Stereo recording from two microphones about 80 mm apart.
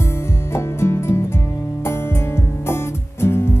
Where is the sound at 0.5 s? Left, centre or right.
Left.